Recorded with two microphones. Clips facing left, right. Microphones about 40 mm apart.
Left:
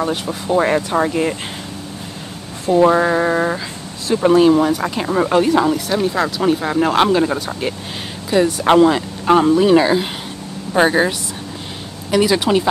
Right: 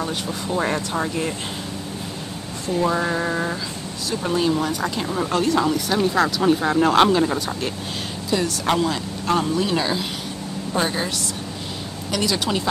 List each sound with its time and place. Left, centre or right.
0.0 s speech: centre
0.6 s speech: left
2.7 s a sound: left
4.1 s speech: left
5.9 s speech: centre
8.3 s speech: left